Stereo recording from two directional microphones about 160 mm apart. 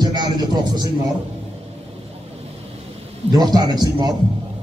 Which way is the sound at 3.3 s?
25° right (ahead or behind).